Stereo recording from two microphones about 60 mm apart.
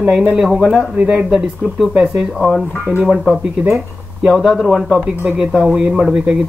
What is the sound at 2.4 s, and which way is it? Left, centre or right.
Speech, centre.